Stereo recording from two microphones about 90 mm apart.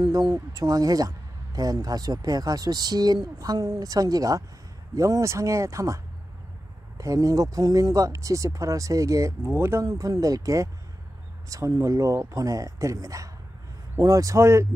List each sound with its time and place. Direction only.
0.0 s speech: 45° right (ahead or behind)
7.0 s speech: 40° right (ahead or behind)
9.8 s speech: 40° right (ahead or behind)